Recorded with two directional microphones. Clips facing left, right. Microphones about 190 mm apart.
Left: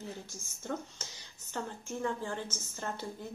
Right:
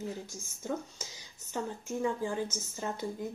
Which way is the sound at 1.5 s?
10° right (ahead or behind).